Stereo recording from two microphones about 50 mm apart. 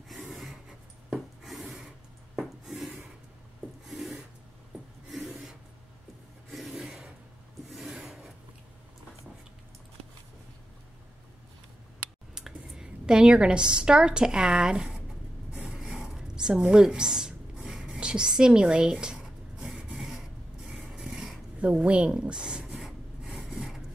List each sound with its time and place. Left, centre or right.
1.1 s rub: centre
3.8 s rub: centre
6.5 s rub: centre
6.8 s a sound: centre
7.7 s rub: centre
8.0 s a sound: centre
12.4 s speech: centre
15.6 s mechanisms: centre
16.1 s speech: centre
17.8 s writing: centre
20.7 s a sound: centre
23.2 s filing: centre